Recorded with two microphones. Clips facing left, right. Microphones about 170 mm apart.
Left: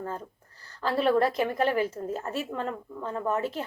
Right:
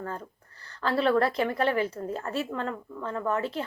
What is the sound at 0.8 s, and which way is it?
A woman's voice, 10° left (ahead or behind).